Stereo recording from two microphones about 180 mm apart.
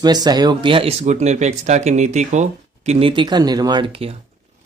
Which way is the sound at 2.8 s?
30° right (ahead or behind).